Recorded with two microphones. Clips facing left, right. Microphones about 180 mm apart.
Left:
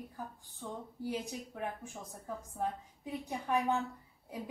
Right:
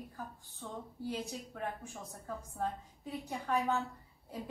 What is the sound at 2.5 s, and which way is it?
Speech, 15° left (ahead or behind).